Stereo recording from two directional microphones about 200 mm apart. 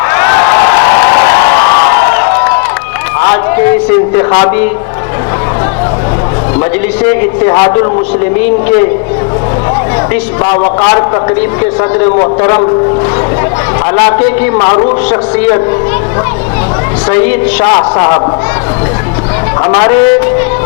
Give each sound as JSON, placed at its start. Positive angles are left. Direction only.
{"t": 0.1, "sound": "crowd", "side_deg": 15}
{"t": 4.2, "sound": "a woman's voice", "side_deg": 20}
{"t": 7.1, "sound": "a woman's voice", "side_deg": 20}
{"t": 10.4, "sound": "a woman's voice", "side_deg": 20}
{"t": 13.9, "sound": "a woman's voice", "side_deg": 15}
{"t": 17.1, "sound": "a woman's voice", "side_deg": 15}
{"t": 19.6, "sound": "a woman's voice", "side_deg": 20}